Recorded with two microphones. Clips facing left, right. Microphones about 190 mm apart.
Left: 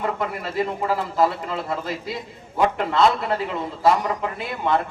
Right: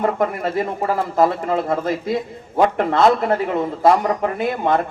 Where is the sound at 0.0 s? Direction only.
45° right (ahead or behind).